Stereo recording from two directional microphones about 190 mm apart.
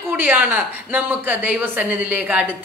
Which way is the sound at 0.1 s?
10° right (ahead or behind).